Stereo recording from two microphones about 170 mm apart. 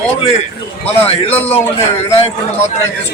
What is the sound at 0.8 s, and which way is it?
Speech, 35° left (ahead or behind).